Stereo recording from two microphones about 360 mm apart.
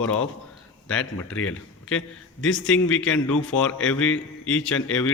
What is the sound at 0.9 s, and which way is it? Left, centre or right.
Speech, centre.